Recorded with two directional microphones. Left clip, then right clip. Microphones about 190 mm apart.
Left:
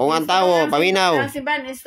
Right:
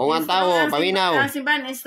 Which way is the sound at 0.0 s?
35° left (ahead or behind).